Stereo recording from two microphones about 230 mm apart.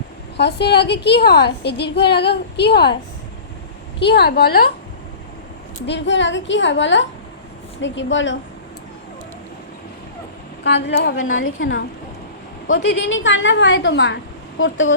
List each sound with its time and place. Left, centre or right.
0.3 s a woman's voice: left
4.0 s a woman's voice: left
5.8 s a woman's voice: left
10.6 s a woman's voice: left